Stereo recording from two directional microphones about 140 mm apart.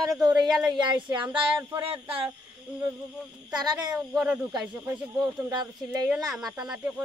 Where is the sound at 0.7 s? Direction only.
35° right (ahead or behind).